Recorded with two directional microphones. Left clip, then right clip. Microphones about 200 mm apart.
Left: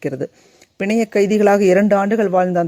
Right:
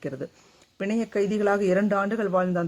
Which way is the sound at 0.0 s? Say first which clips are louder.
Left 10 dB; 35° left (ahead or behind).